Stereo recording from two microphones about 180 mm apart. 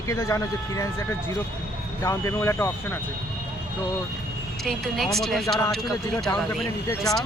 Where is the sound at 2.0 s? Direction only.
15° left (ahead or behind).